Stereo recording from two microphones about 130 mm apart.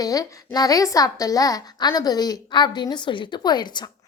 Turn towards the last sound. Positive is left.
turn(degrees=35)  # may be behind; listen again after turning